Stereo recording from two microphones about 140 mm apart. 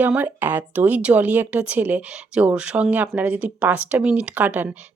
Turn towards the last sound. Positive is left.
turn(degrees=-10)  # may be behind; listen again after turning